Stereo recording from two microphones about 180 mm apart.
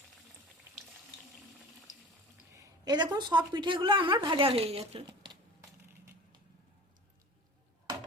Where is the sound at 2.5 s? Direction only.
25° right (ahead or behind).